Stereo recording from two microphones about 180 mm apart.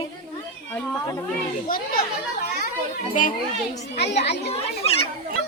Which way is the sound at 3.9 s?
70° left (ahead or behind).